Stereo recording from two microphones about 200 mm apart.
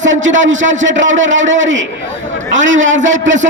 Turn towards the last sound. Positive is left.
turn(degrees=-70)  # may be behind; listen again after turning